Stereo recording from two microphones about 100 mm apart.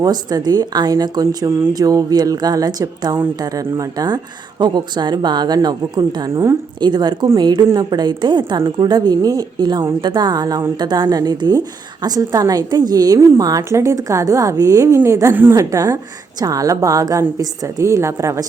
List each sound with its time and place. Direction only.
0.0 s a woman's voice: 40° right (ahead or behind)